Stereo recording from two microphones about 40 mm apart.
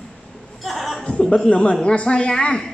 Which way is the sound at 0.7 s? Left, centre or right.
Centre.